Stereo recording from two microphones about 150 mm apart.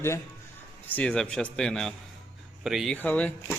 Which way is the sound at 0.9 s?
5° left (ahead or behind).